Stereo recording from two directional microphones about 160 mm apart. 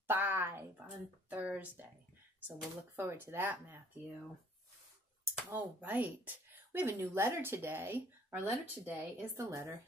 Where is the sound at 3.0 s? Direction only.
15° right (ahead or behind).